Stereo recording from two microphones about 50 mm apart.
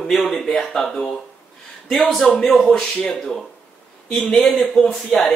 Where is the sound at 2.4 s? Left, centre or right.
Centre.